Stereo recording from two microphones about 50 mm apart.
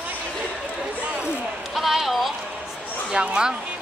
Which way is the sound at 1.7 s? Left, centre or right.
Centre.